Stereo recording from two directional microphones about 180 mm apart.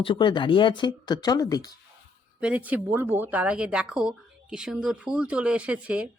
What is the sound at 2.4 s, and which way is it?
Speech, 5° right (ahead or behind).